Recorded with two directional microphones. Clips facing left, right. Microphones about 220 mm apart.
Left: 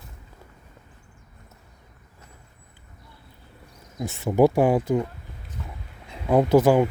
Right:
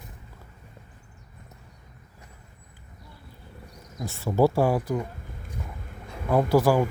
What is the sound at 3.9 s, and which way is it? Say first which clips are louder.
Speech: left 3 dB; 20° left (ahead or behind).